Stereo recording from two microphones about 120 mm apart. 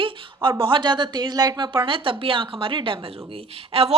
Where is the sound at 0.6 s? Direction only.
40° right (ahead or behind).